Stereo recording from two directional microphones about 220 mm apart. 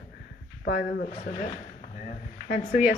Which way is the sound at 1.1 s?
30° left (ahead or behind).